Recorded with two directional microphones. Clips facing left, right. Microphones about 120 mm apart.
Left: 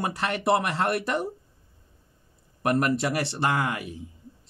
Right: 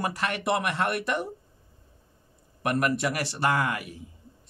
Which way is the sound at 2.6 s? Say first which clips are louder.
Left 2 dB; 30° left (ahead or behind).